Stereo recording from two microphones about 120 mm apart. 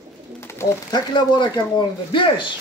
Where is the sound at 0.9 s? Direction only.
40° left (ahead or behind).